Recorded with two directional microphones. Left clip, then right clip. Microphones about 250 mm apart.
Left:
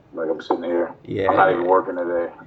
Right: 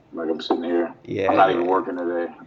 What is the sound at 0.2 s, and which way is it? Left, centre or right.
Speech, right.